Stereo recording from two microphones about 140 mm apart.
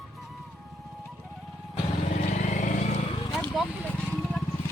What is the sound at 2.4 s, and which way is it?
Vehicle, 60° left (ahead or behind).